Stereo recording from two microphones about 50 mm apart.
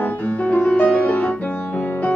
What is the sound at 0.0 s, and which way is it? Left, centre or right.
Music, left.